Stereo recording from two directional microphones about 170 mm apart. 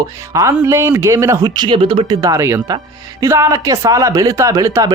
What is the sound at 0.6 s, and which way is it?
Speech, 15° right (ahead or behind).